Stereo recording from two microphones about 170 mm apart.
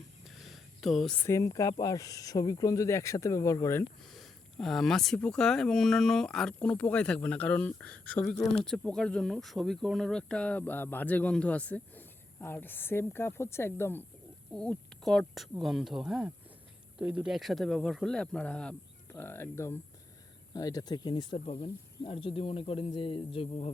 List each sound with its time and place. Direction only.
0.3 s a sound: centre (ahead or behind)
1.2 s speech: 20° left (ahead or behind)
4.1 s speech: centre (ahead or behind); by 23.7 s 35° left (ahead or behind)